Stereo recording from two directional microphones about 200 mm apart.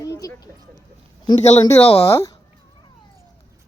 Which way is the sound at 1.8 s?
30° left (ahead or behind).